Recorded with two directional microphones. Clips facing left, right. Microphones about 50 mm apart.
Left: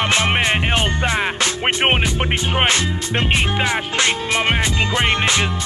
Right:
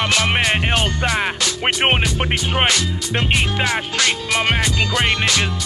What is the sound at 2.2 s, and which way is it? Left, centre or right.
Music, centre.